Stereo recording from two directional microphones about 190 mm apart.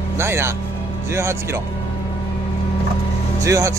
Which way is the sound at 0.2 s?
15° right (ahead or behind).